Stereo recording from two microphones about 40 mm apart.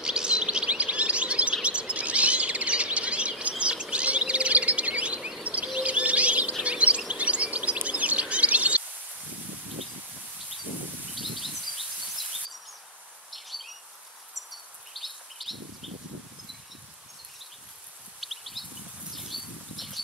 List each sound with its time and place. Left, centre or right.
0.0 s chirp: right
1.5 s bird: right
3.9 s a sound: right
5.4 s insect: right
5.8 s bird: right
6.6 s a sound: right
7.1 s chirp: right
11.3 s rustling leaves: centre
13.3 s bird vocalization: centre
14.5 s bird: centre
18.2 s a sound: centre
19.1 s bird flight: centre